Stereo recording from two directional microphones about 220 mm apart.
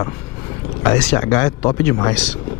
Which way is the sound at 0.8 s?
10° left (ahead or behind).